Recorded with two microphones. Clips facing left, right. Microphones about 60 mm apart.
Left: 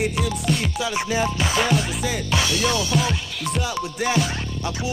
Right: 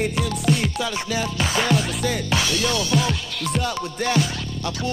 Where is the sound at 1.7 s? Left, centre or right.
Centre.